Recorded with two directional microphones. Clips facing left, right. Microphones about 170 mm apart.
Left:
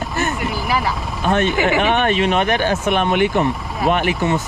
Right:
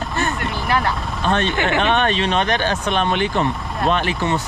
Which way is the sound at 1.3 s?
15° left (ahead or behind).